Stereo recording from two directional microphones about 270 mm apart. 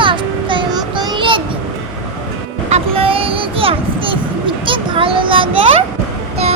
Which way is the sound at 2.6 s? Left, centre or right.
Right.